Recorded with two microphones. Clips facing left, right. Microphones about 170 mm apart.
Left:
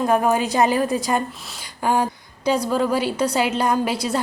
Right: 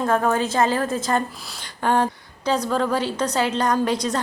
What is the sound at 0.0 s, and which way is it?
A woman's voice, 15° left (ahead or behind).